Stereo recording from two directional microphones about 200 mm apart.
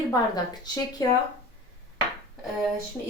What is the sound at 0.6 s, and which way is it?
Speech, 20° left (ahead or behind).